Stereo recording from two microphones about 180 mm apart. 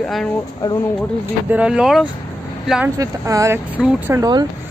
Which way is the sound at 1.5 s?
5° right (ahead or behind).